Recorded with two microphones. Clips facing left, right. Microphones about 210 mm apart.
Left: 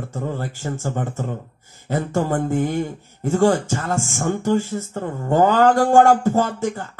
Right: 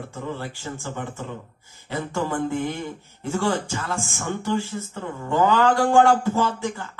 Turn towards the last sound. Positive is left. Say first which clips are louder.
# left 3 dB
turn(degrees=45)  # may be behind; listen again after turning